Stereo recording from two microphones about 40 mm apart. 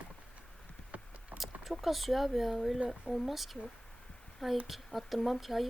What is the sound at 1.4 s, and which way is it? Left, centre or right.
Speech, centre.